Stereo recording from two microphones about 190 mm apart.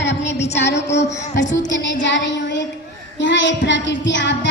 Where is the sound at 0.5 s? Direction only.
65° left (ahead or behind).